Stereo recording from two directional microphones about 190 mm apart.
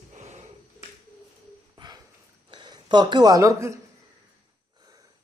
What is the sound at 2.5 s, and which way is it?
Speech, 25° right (ahead or behind).